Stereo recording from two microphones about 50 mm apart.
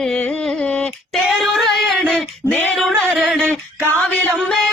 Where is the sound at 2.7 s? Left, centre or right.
Centre.